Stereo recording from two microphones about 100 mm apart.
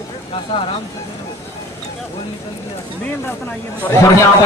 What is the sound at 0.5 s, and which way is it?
Speech, 55° left (ahead or behind).